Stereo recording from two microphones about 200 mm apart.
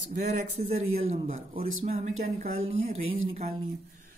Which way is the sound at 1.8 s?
35° right (ahead or behind).